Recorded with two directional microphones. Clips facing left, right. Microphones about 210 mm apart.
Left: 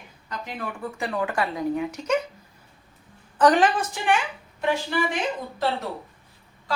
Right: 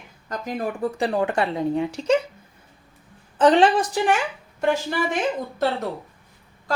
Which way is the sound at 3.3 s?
25° right (ahead or behind).